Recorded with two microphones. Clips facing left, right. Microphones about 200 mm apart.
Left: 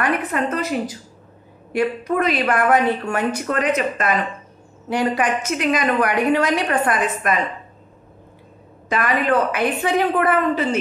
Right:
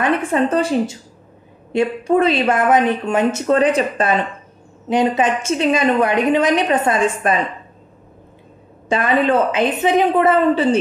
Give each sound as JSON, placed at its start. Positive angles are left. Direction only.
{"t": 0.0, "sound": "a woman's voice", "side_deg": -25}
{"t": 8.8, "sound": "a woman's voice", "side_deg": -30}